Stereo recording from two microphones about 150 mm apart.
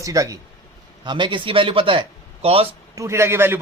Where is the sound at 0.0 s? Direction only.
20° right (ahead or behind); by 2.6 s 40° right (ahead or behind).